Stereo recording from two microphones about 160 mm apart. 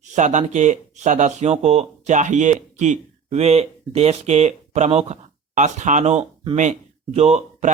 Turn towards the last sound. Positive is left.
turn(degrees=-45)  # may be behind; listen again after turning